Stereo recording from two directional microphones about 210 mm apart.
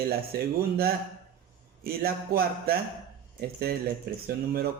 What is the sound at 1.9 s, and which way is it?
Speech, 45° right (ahead or behind).